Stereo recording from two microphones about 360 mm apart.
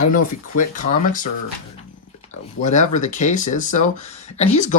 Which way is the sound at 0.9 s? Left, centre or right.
Left.